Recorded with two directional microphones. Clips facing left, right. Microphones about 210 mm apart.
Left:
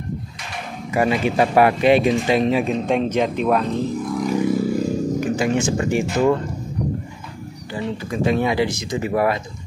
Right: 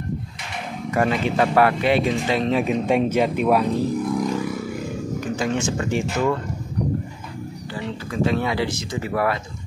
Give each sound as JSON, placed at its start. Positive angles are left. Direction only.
{"t": 0.9, "sound": "speech", "side_deg": 10}
{"t": 2.6, "sound": "speech", "side_deg": -10}
{"t": 4.3, "sound": "vehicle", "side_deg": 25}
{"t": 5.2, "sound": "speech", "side_deg": 10}
{"t": 7.7, "sound": "speech", "side_deg": 15}